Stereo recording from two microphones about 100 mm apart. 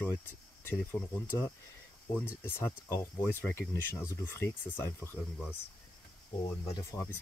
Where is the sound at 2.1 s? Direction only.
20° left (ahead or behind).